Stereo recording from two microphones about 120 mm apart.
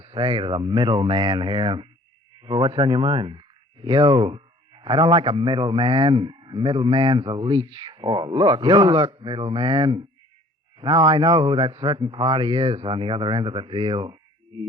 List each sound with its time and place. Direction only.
0.0 s speech: 45° right (ahead or behind)